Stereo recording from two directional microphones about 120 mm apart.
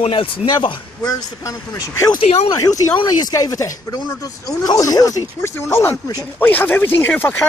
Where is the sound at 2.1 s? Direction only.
60° left (ahead or behind).